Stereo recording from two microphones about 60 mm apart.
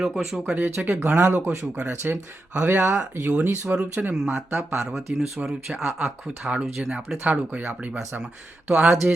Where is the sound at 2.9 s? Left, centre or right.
Right.